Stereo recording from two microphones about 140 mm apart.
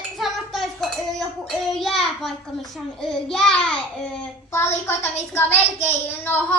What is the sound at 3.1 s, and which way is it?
Speech, 5° left (ahead or behind).